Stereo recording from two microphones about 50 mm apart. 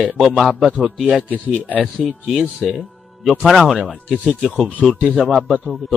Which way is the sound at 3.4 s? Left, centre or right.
Centre.